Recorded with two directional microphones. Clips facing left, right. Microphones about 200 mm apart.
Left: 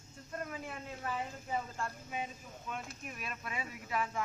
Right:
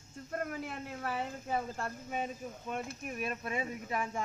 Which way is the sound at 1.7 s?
55° right (ahead or behind).